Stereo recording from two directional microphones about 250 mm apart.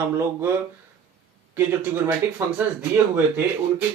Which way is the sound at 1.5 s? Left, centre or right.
Centre.